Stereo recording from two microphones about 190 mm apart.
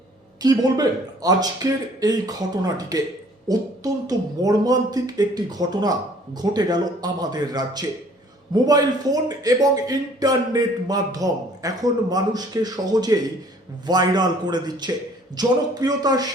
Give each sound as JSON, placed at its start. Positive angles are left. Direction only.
{"t": 0.4, "sound": "a man's voice", "side_deg": -20}